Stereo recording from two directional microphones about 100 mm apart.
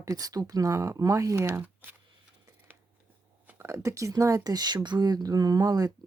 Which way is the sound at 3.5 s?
30° right (ahead or behind).